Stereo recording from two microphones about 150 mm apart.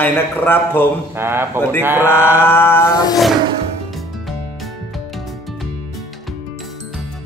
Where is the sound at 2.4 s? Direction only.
15° left (ahead or behind).